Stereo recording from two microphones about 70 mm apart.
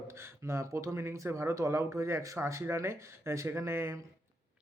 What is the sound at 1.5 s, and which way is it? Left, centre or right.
Speech, right.